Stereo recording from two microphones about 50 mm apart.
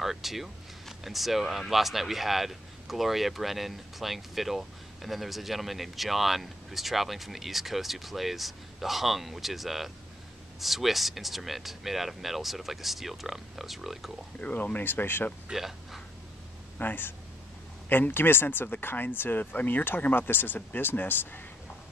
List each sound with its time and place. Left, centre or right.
0.0 s speech: centre
14.4 s speech: left
15.5 s speech: centre
16.7 s speech: left